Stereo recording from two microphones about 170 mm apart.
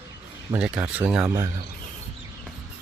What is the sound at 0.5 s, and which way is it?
Speech, 5° right (ahead or behind).